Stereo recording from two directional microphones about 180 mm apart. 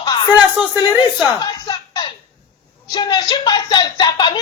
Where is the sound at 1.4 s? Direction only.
20° left (ahead or behind).